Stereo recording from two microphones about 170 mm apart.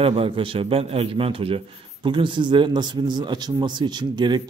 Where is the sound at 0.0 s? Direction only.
30° right (ahead or behind).